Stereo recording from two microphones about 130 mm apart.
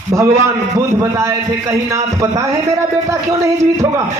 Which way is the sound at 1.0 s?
25° right (ahead or behind).